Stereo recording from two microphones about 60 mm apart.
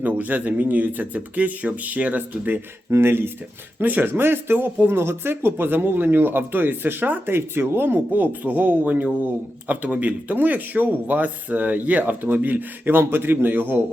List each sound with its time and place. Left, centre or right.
0.0 s speech: right
2.9 s speech: right